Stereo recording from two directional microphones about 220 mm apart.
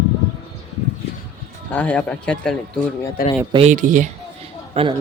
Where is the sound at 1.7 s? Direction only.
5° left (ahead or behind).